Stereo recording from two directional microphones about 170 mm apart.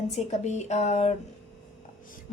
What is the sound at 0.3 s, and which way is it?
Speech, 40° left (ahead or behind).